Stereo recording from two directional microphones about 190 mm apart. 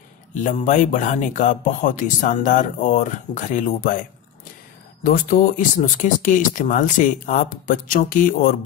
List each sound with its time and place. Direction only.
0.3 s speech: 40° left (ahead or behind)
5.0 s speech: 50° left (ahead or behind)